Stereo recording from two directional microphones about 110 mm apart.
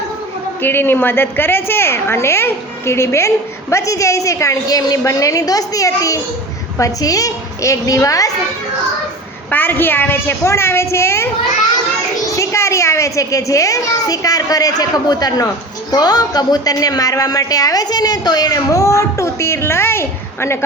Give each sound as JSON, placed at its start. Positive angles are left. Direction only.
{"t": 0.6, "sound": "a woman's voice", "side_deg": 20}
{"t": 9.5, "sound": "a woman's voice", "side_deg": 15}
{"t": 12.4, "sound": "a woman's voice", "side_deg": 25}